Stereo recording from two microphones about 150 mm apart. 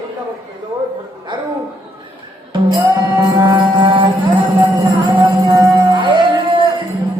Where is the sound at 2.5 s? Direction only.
30° right (ahead or behind).